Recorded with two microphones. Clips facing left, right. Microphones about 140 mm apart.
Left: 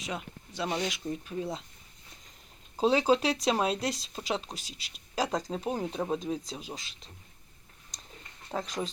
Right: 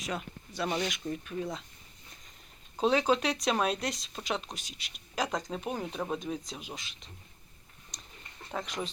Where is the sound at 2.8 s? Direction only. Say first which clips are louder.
Left 2 dB; 30° left (ahead or behind).